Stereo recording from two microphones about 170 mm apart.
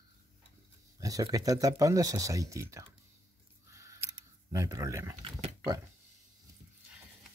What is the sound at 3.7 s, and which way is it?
Camera, 20° right (ahead or behind).